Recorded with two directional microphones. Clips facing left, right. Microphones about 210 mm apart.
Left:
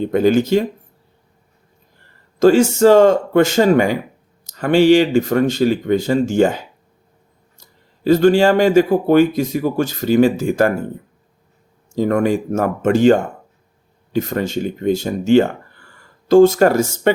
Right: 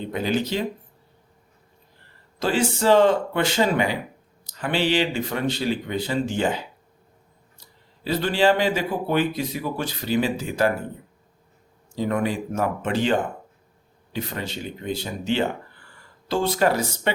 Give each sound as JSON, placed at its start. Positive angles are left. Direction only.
{"t": 0.0, "sound": "speech", "side_deg": 45}
{"t": 2.4, "sound": "speech", "side_deg": 45}
{"t": 11.9, "sound": "speech", "side_deg": 45}